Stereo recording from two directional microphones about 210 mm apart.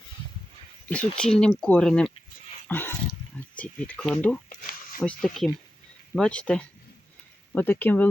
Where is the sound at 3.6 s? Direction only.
5° left (ahead or behind).